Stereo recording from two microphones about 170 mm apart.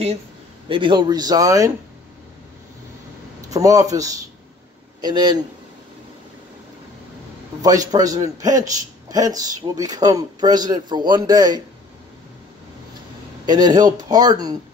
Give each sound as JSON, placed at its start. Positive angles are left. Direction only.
{"t": 0.7, "sound": "a man's voice", "side_deg": -30}
{"t": 3.3, "sound": "a man's voice", "side_deg": -20}
{"t": 7.6, "sound": "a man's voice", "side_deg": -20}
{"t": 13.5, "sound": "a man's voice", "side_deg": -25}